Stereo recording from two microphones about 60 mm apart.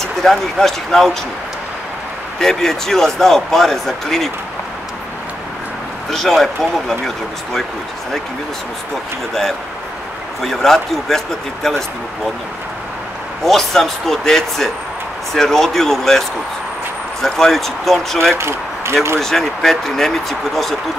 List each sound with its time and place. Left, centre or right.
0.0 s speech: centre
2.4 s speech: centre
6.0 s speech: centre
10.4 s speech: centre
13.4 s speech: centre
18.4 s speech: right
19.1 s speech: centre